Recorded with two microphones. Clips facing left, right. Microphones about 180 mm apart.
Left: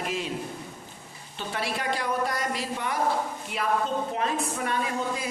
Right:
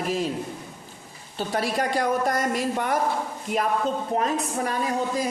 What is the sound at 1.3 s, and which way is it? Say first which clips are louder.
A woman's voice: right 6 dB; 40° right (ahead or behind).